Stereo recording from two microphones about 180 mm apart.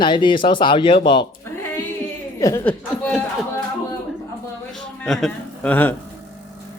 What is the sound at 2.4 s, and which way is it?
Speech, 20° left (ahead or behind).